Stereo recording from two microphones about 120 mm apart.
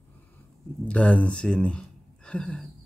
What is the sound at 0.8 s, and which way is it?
Speech, 10° left (ahead or behind).